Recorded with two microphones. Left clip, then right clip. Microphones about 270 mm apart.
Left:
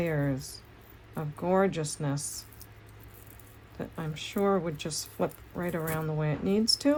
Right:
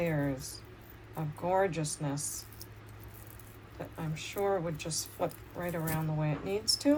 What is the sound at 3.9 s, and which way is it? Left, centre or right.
Speech, left.